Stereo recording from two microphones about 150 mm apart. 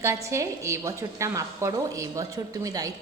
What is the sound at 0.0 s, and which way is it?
A woman's voice, 20° right (ahead or behind).